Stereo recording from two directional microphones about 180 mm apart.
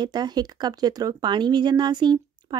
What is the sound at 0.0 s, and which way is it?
Speech, 25° right (ahead or behind).